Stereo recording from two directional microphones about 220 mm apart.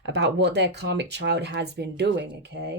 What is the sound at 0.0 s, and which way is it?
Speech, 50° right (ahead or behind).